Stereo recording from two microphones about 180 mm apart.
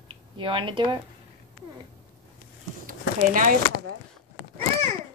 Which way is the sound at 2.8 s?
50° right (ahead or behind).